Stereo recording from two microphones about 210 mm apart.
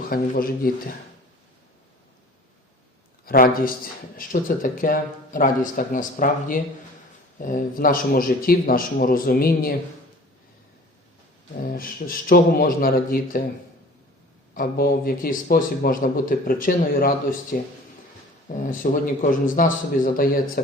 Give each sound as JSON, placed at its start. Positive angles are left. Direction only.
{"t": 0.1, "sound": "a man's voice", "side_deg": 45}
{"t": 3.2, "sound": "a man's voice", "side_deg": 45}
{"t": 11.6, "sound": "a man's voice", "side_deg": 40}
{"t": 14.5, "sound": "a man's voice", "side_deg": 45}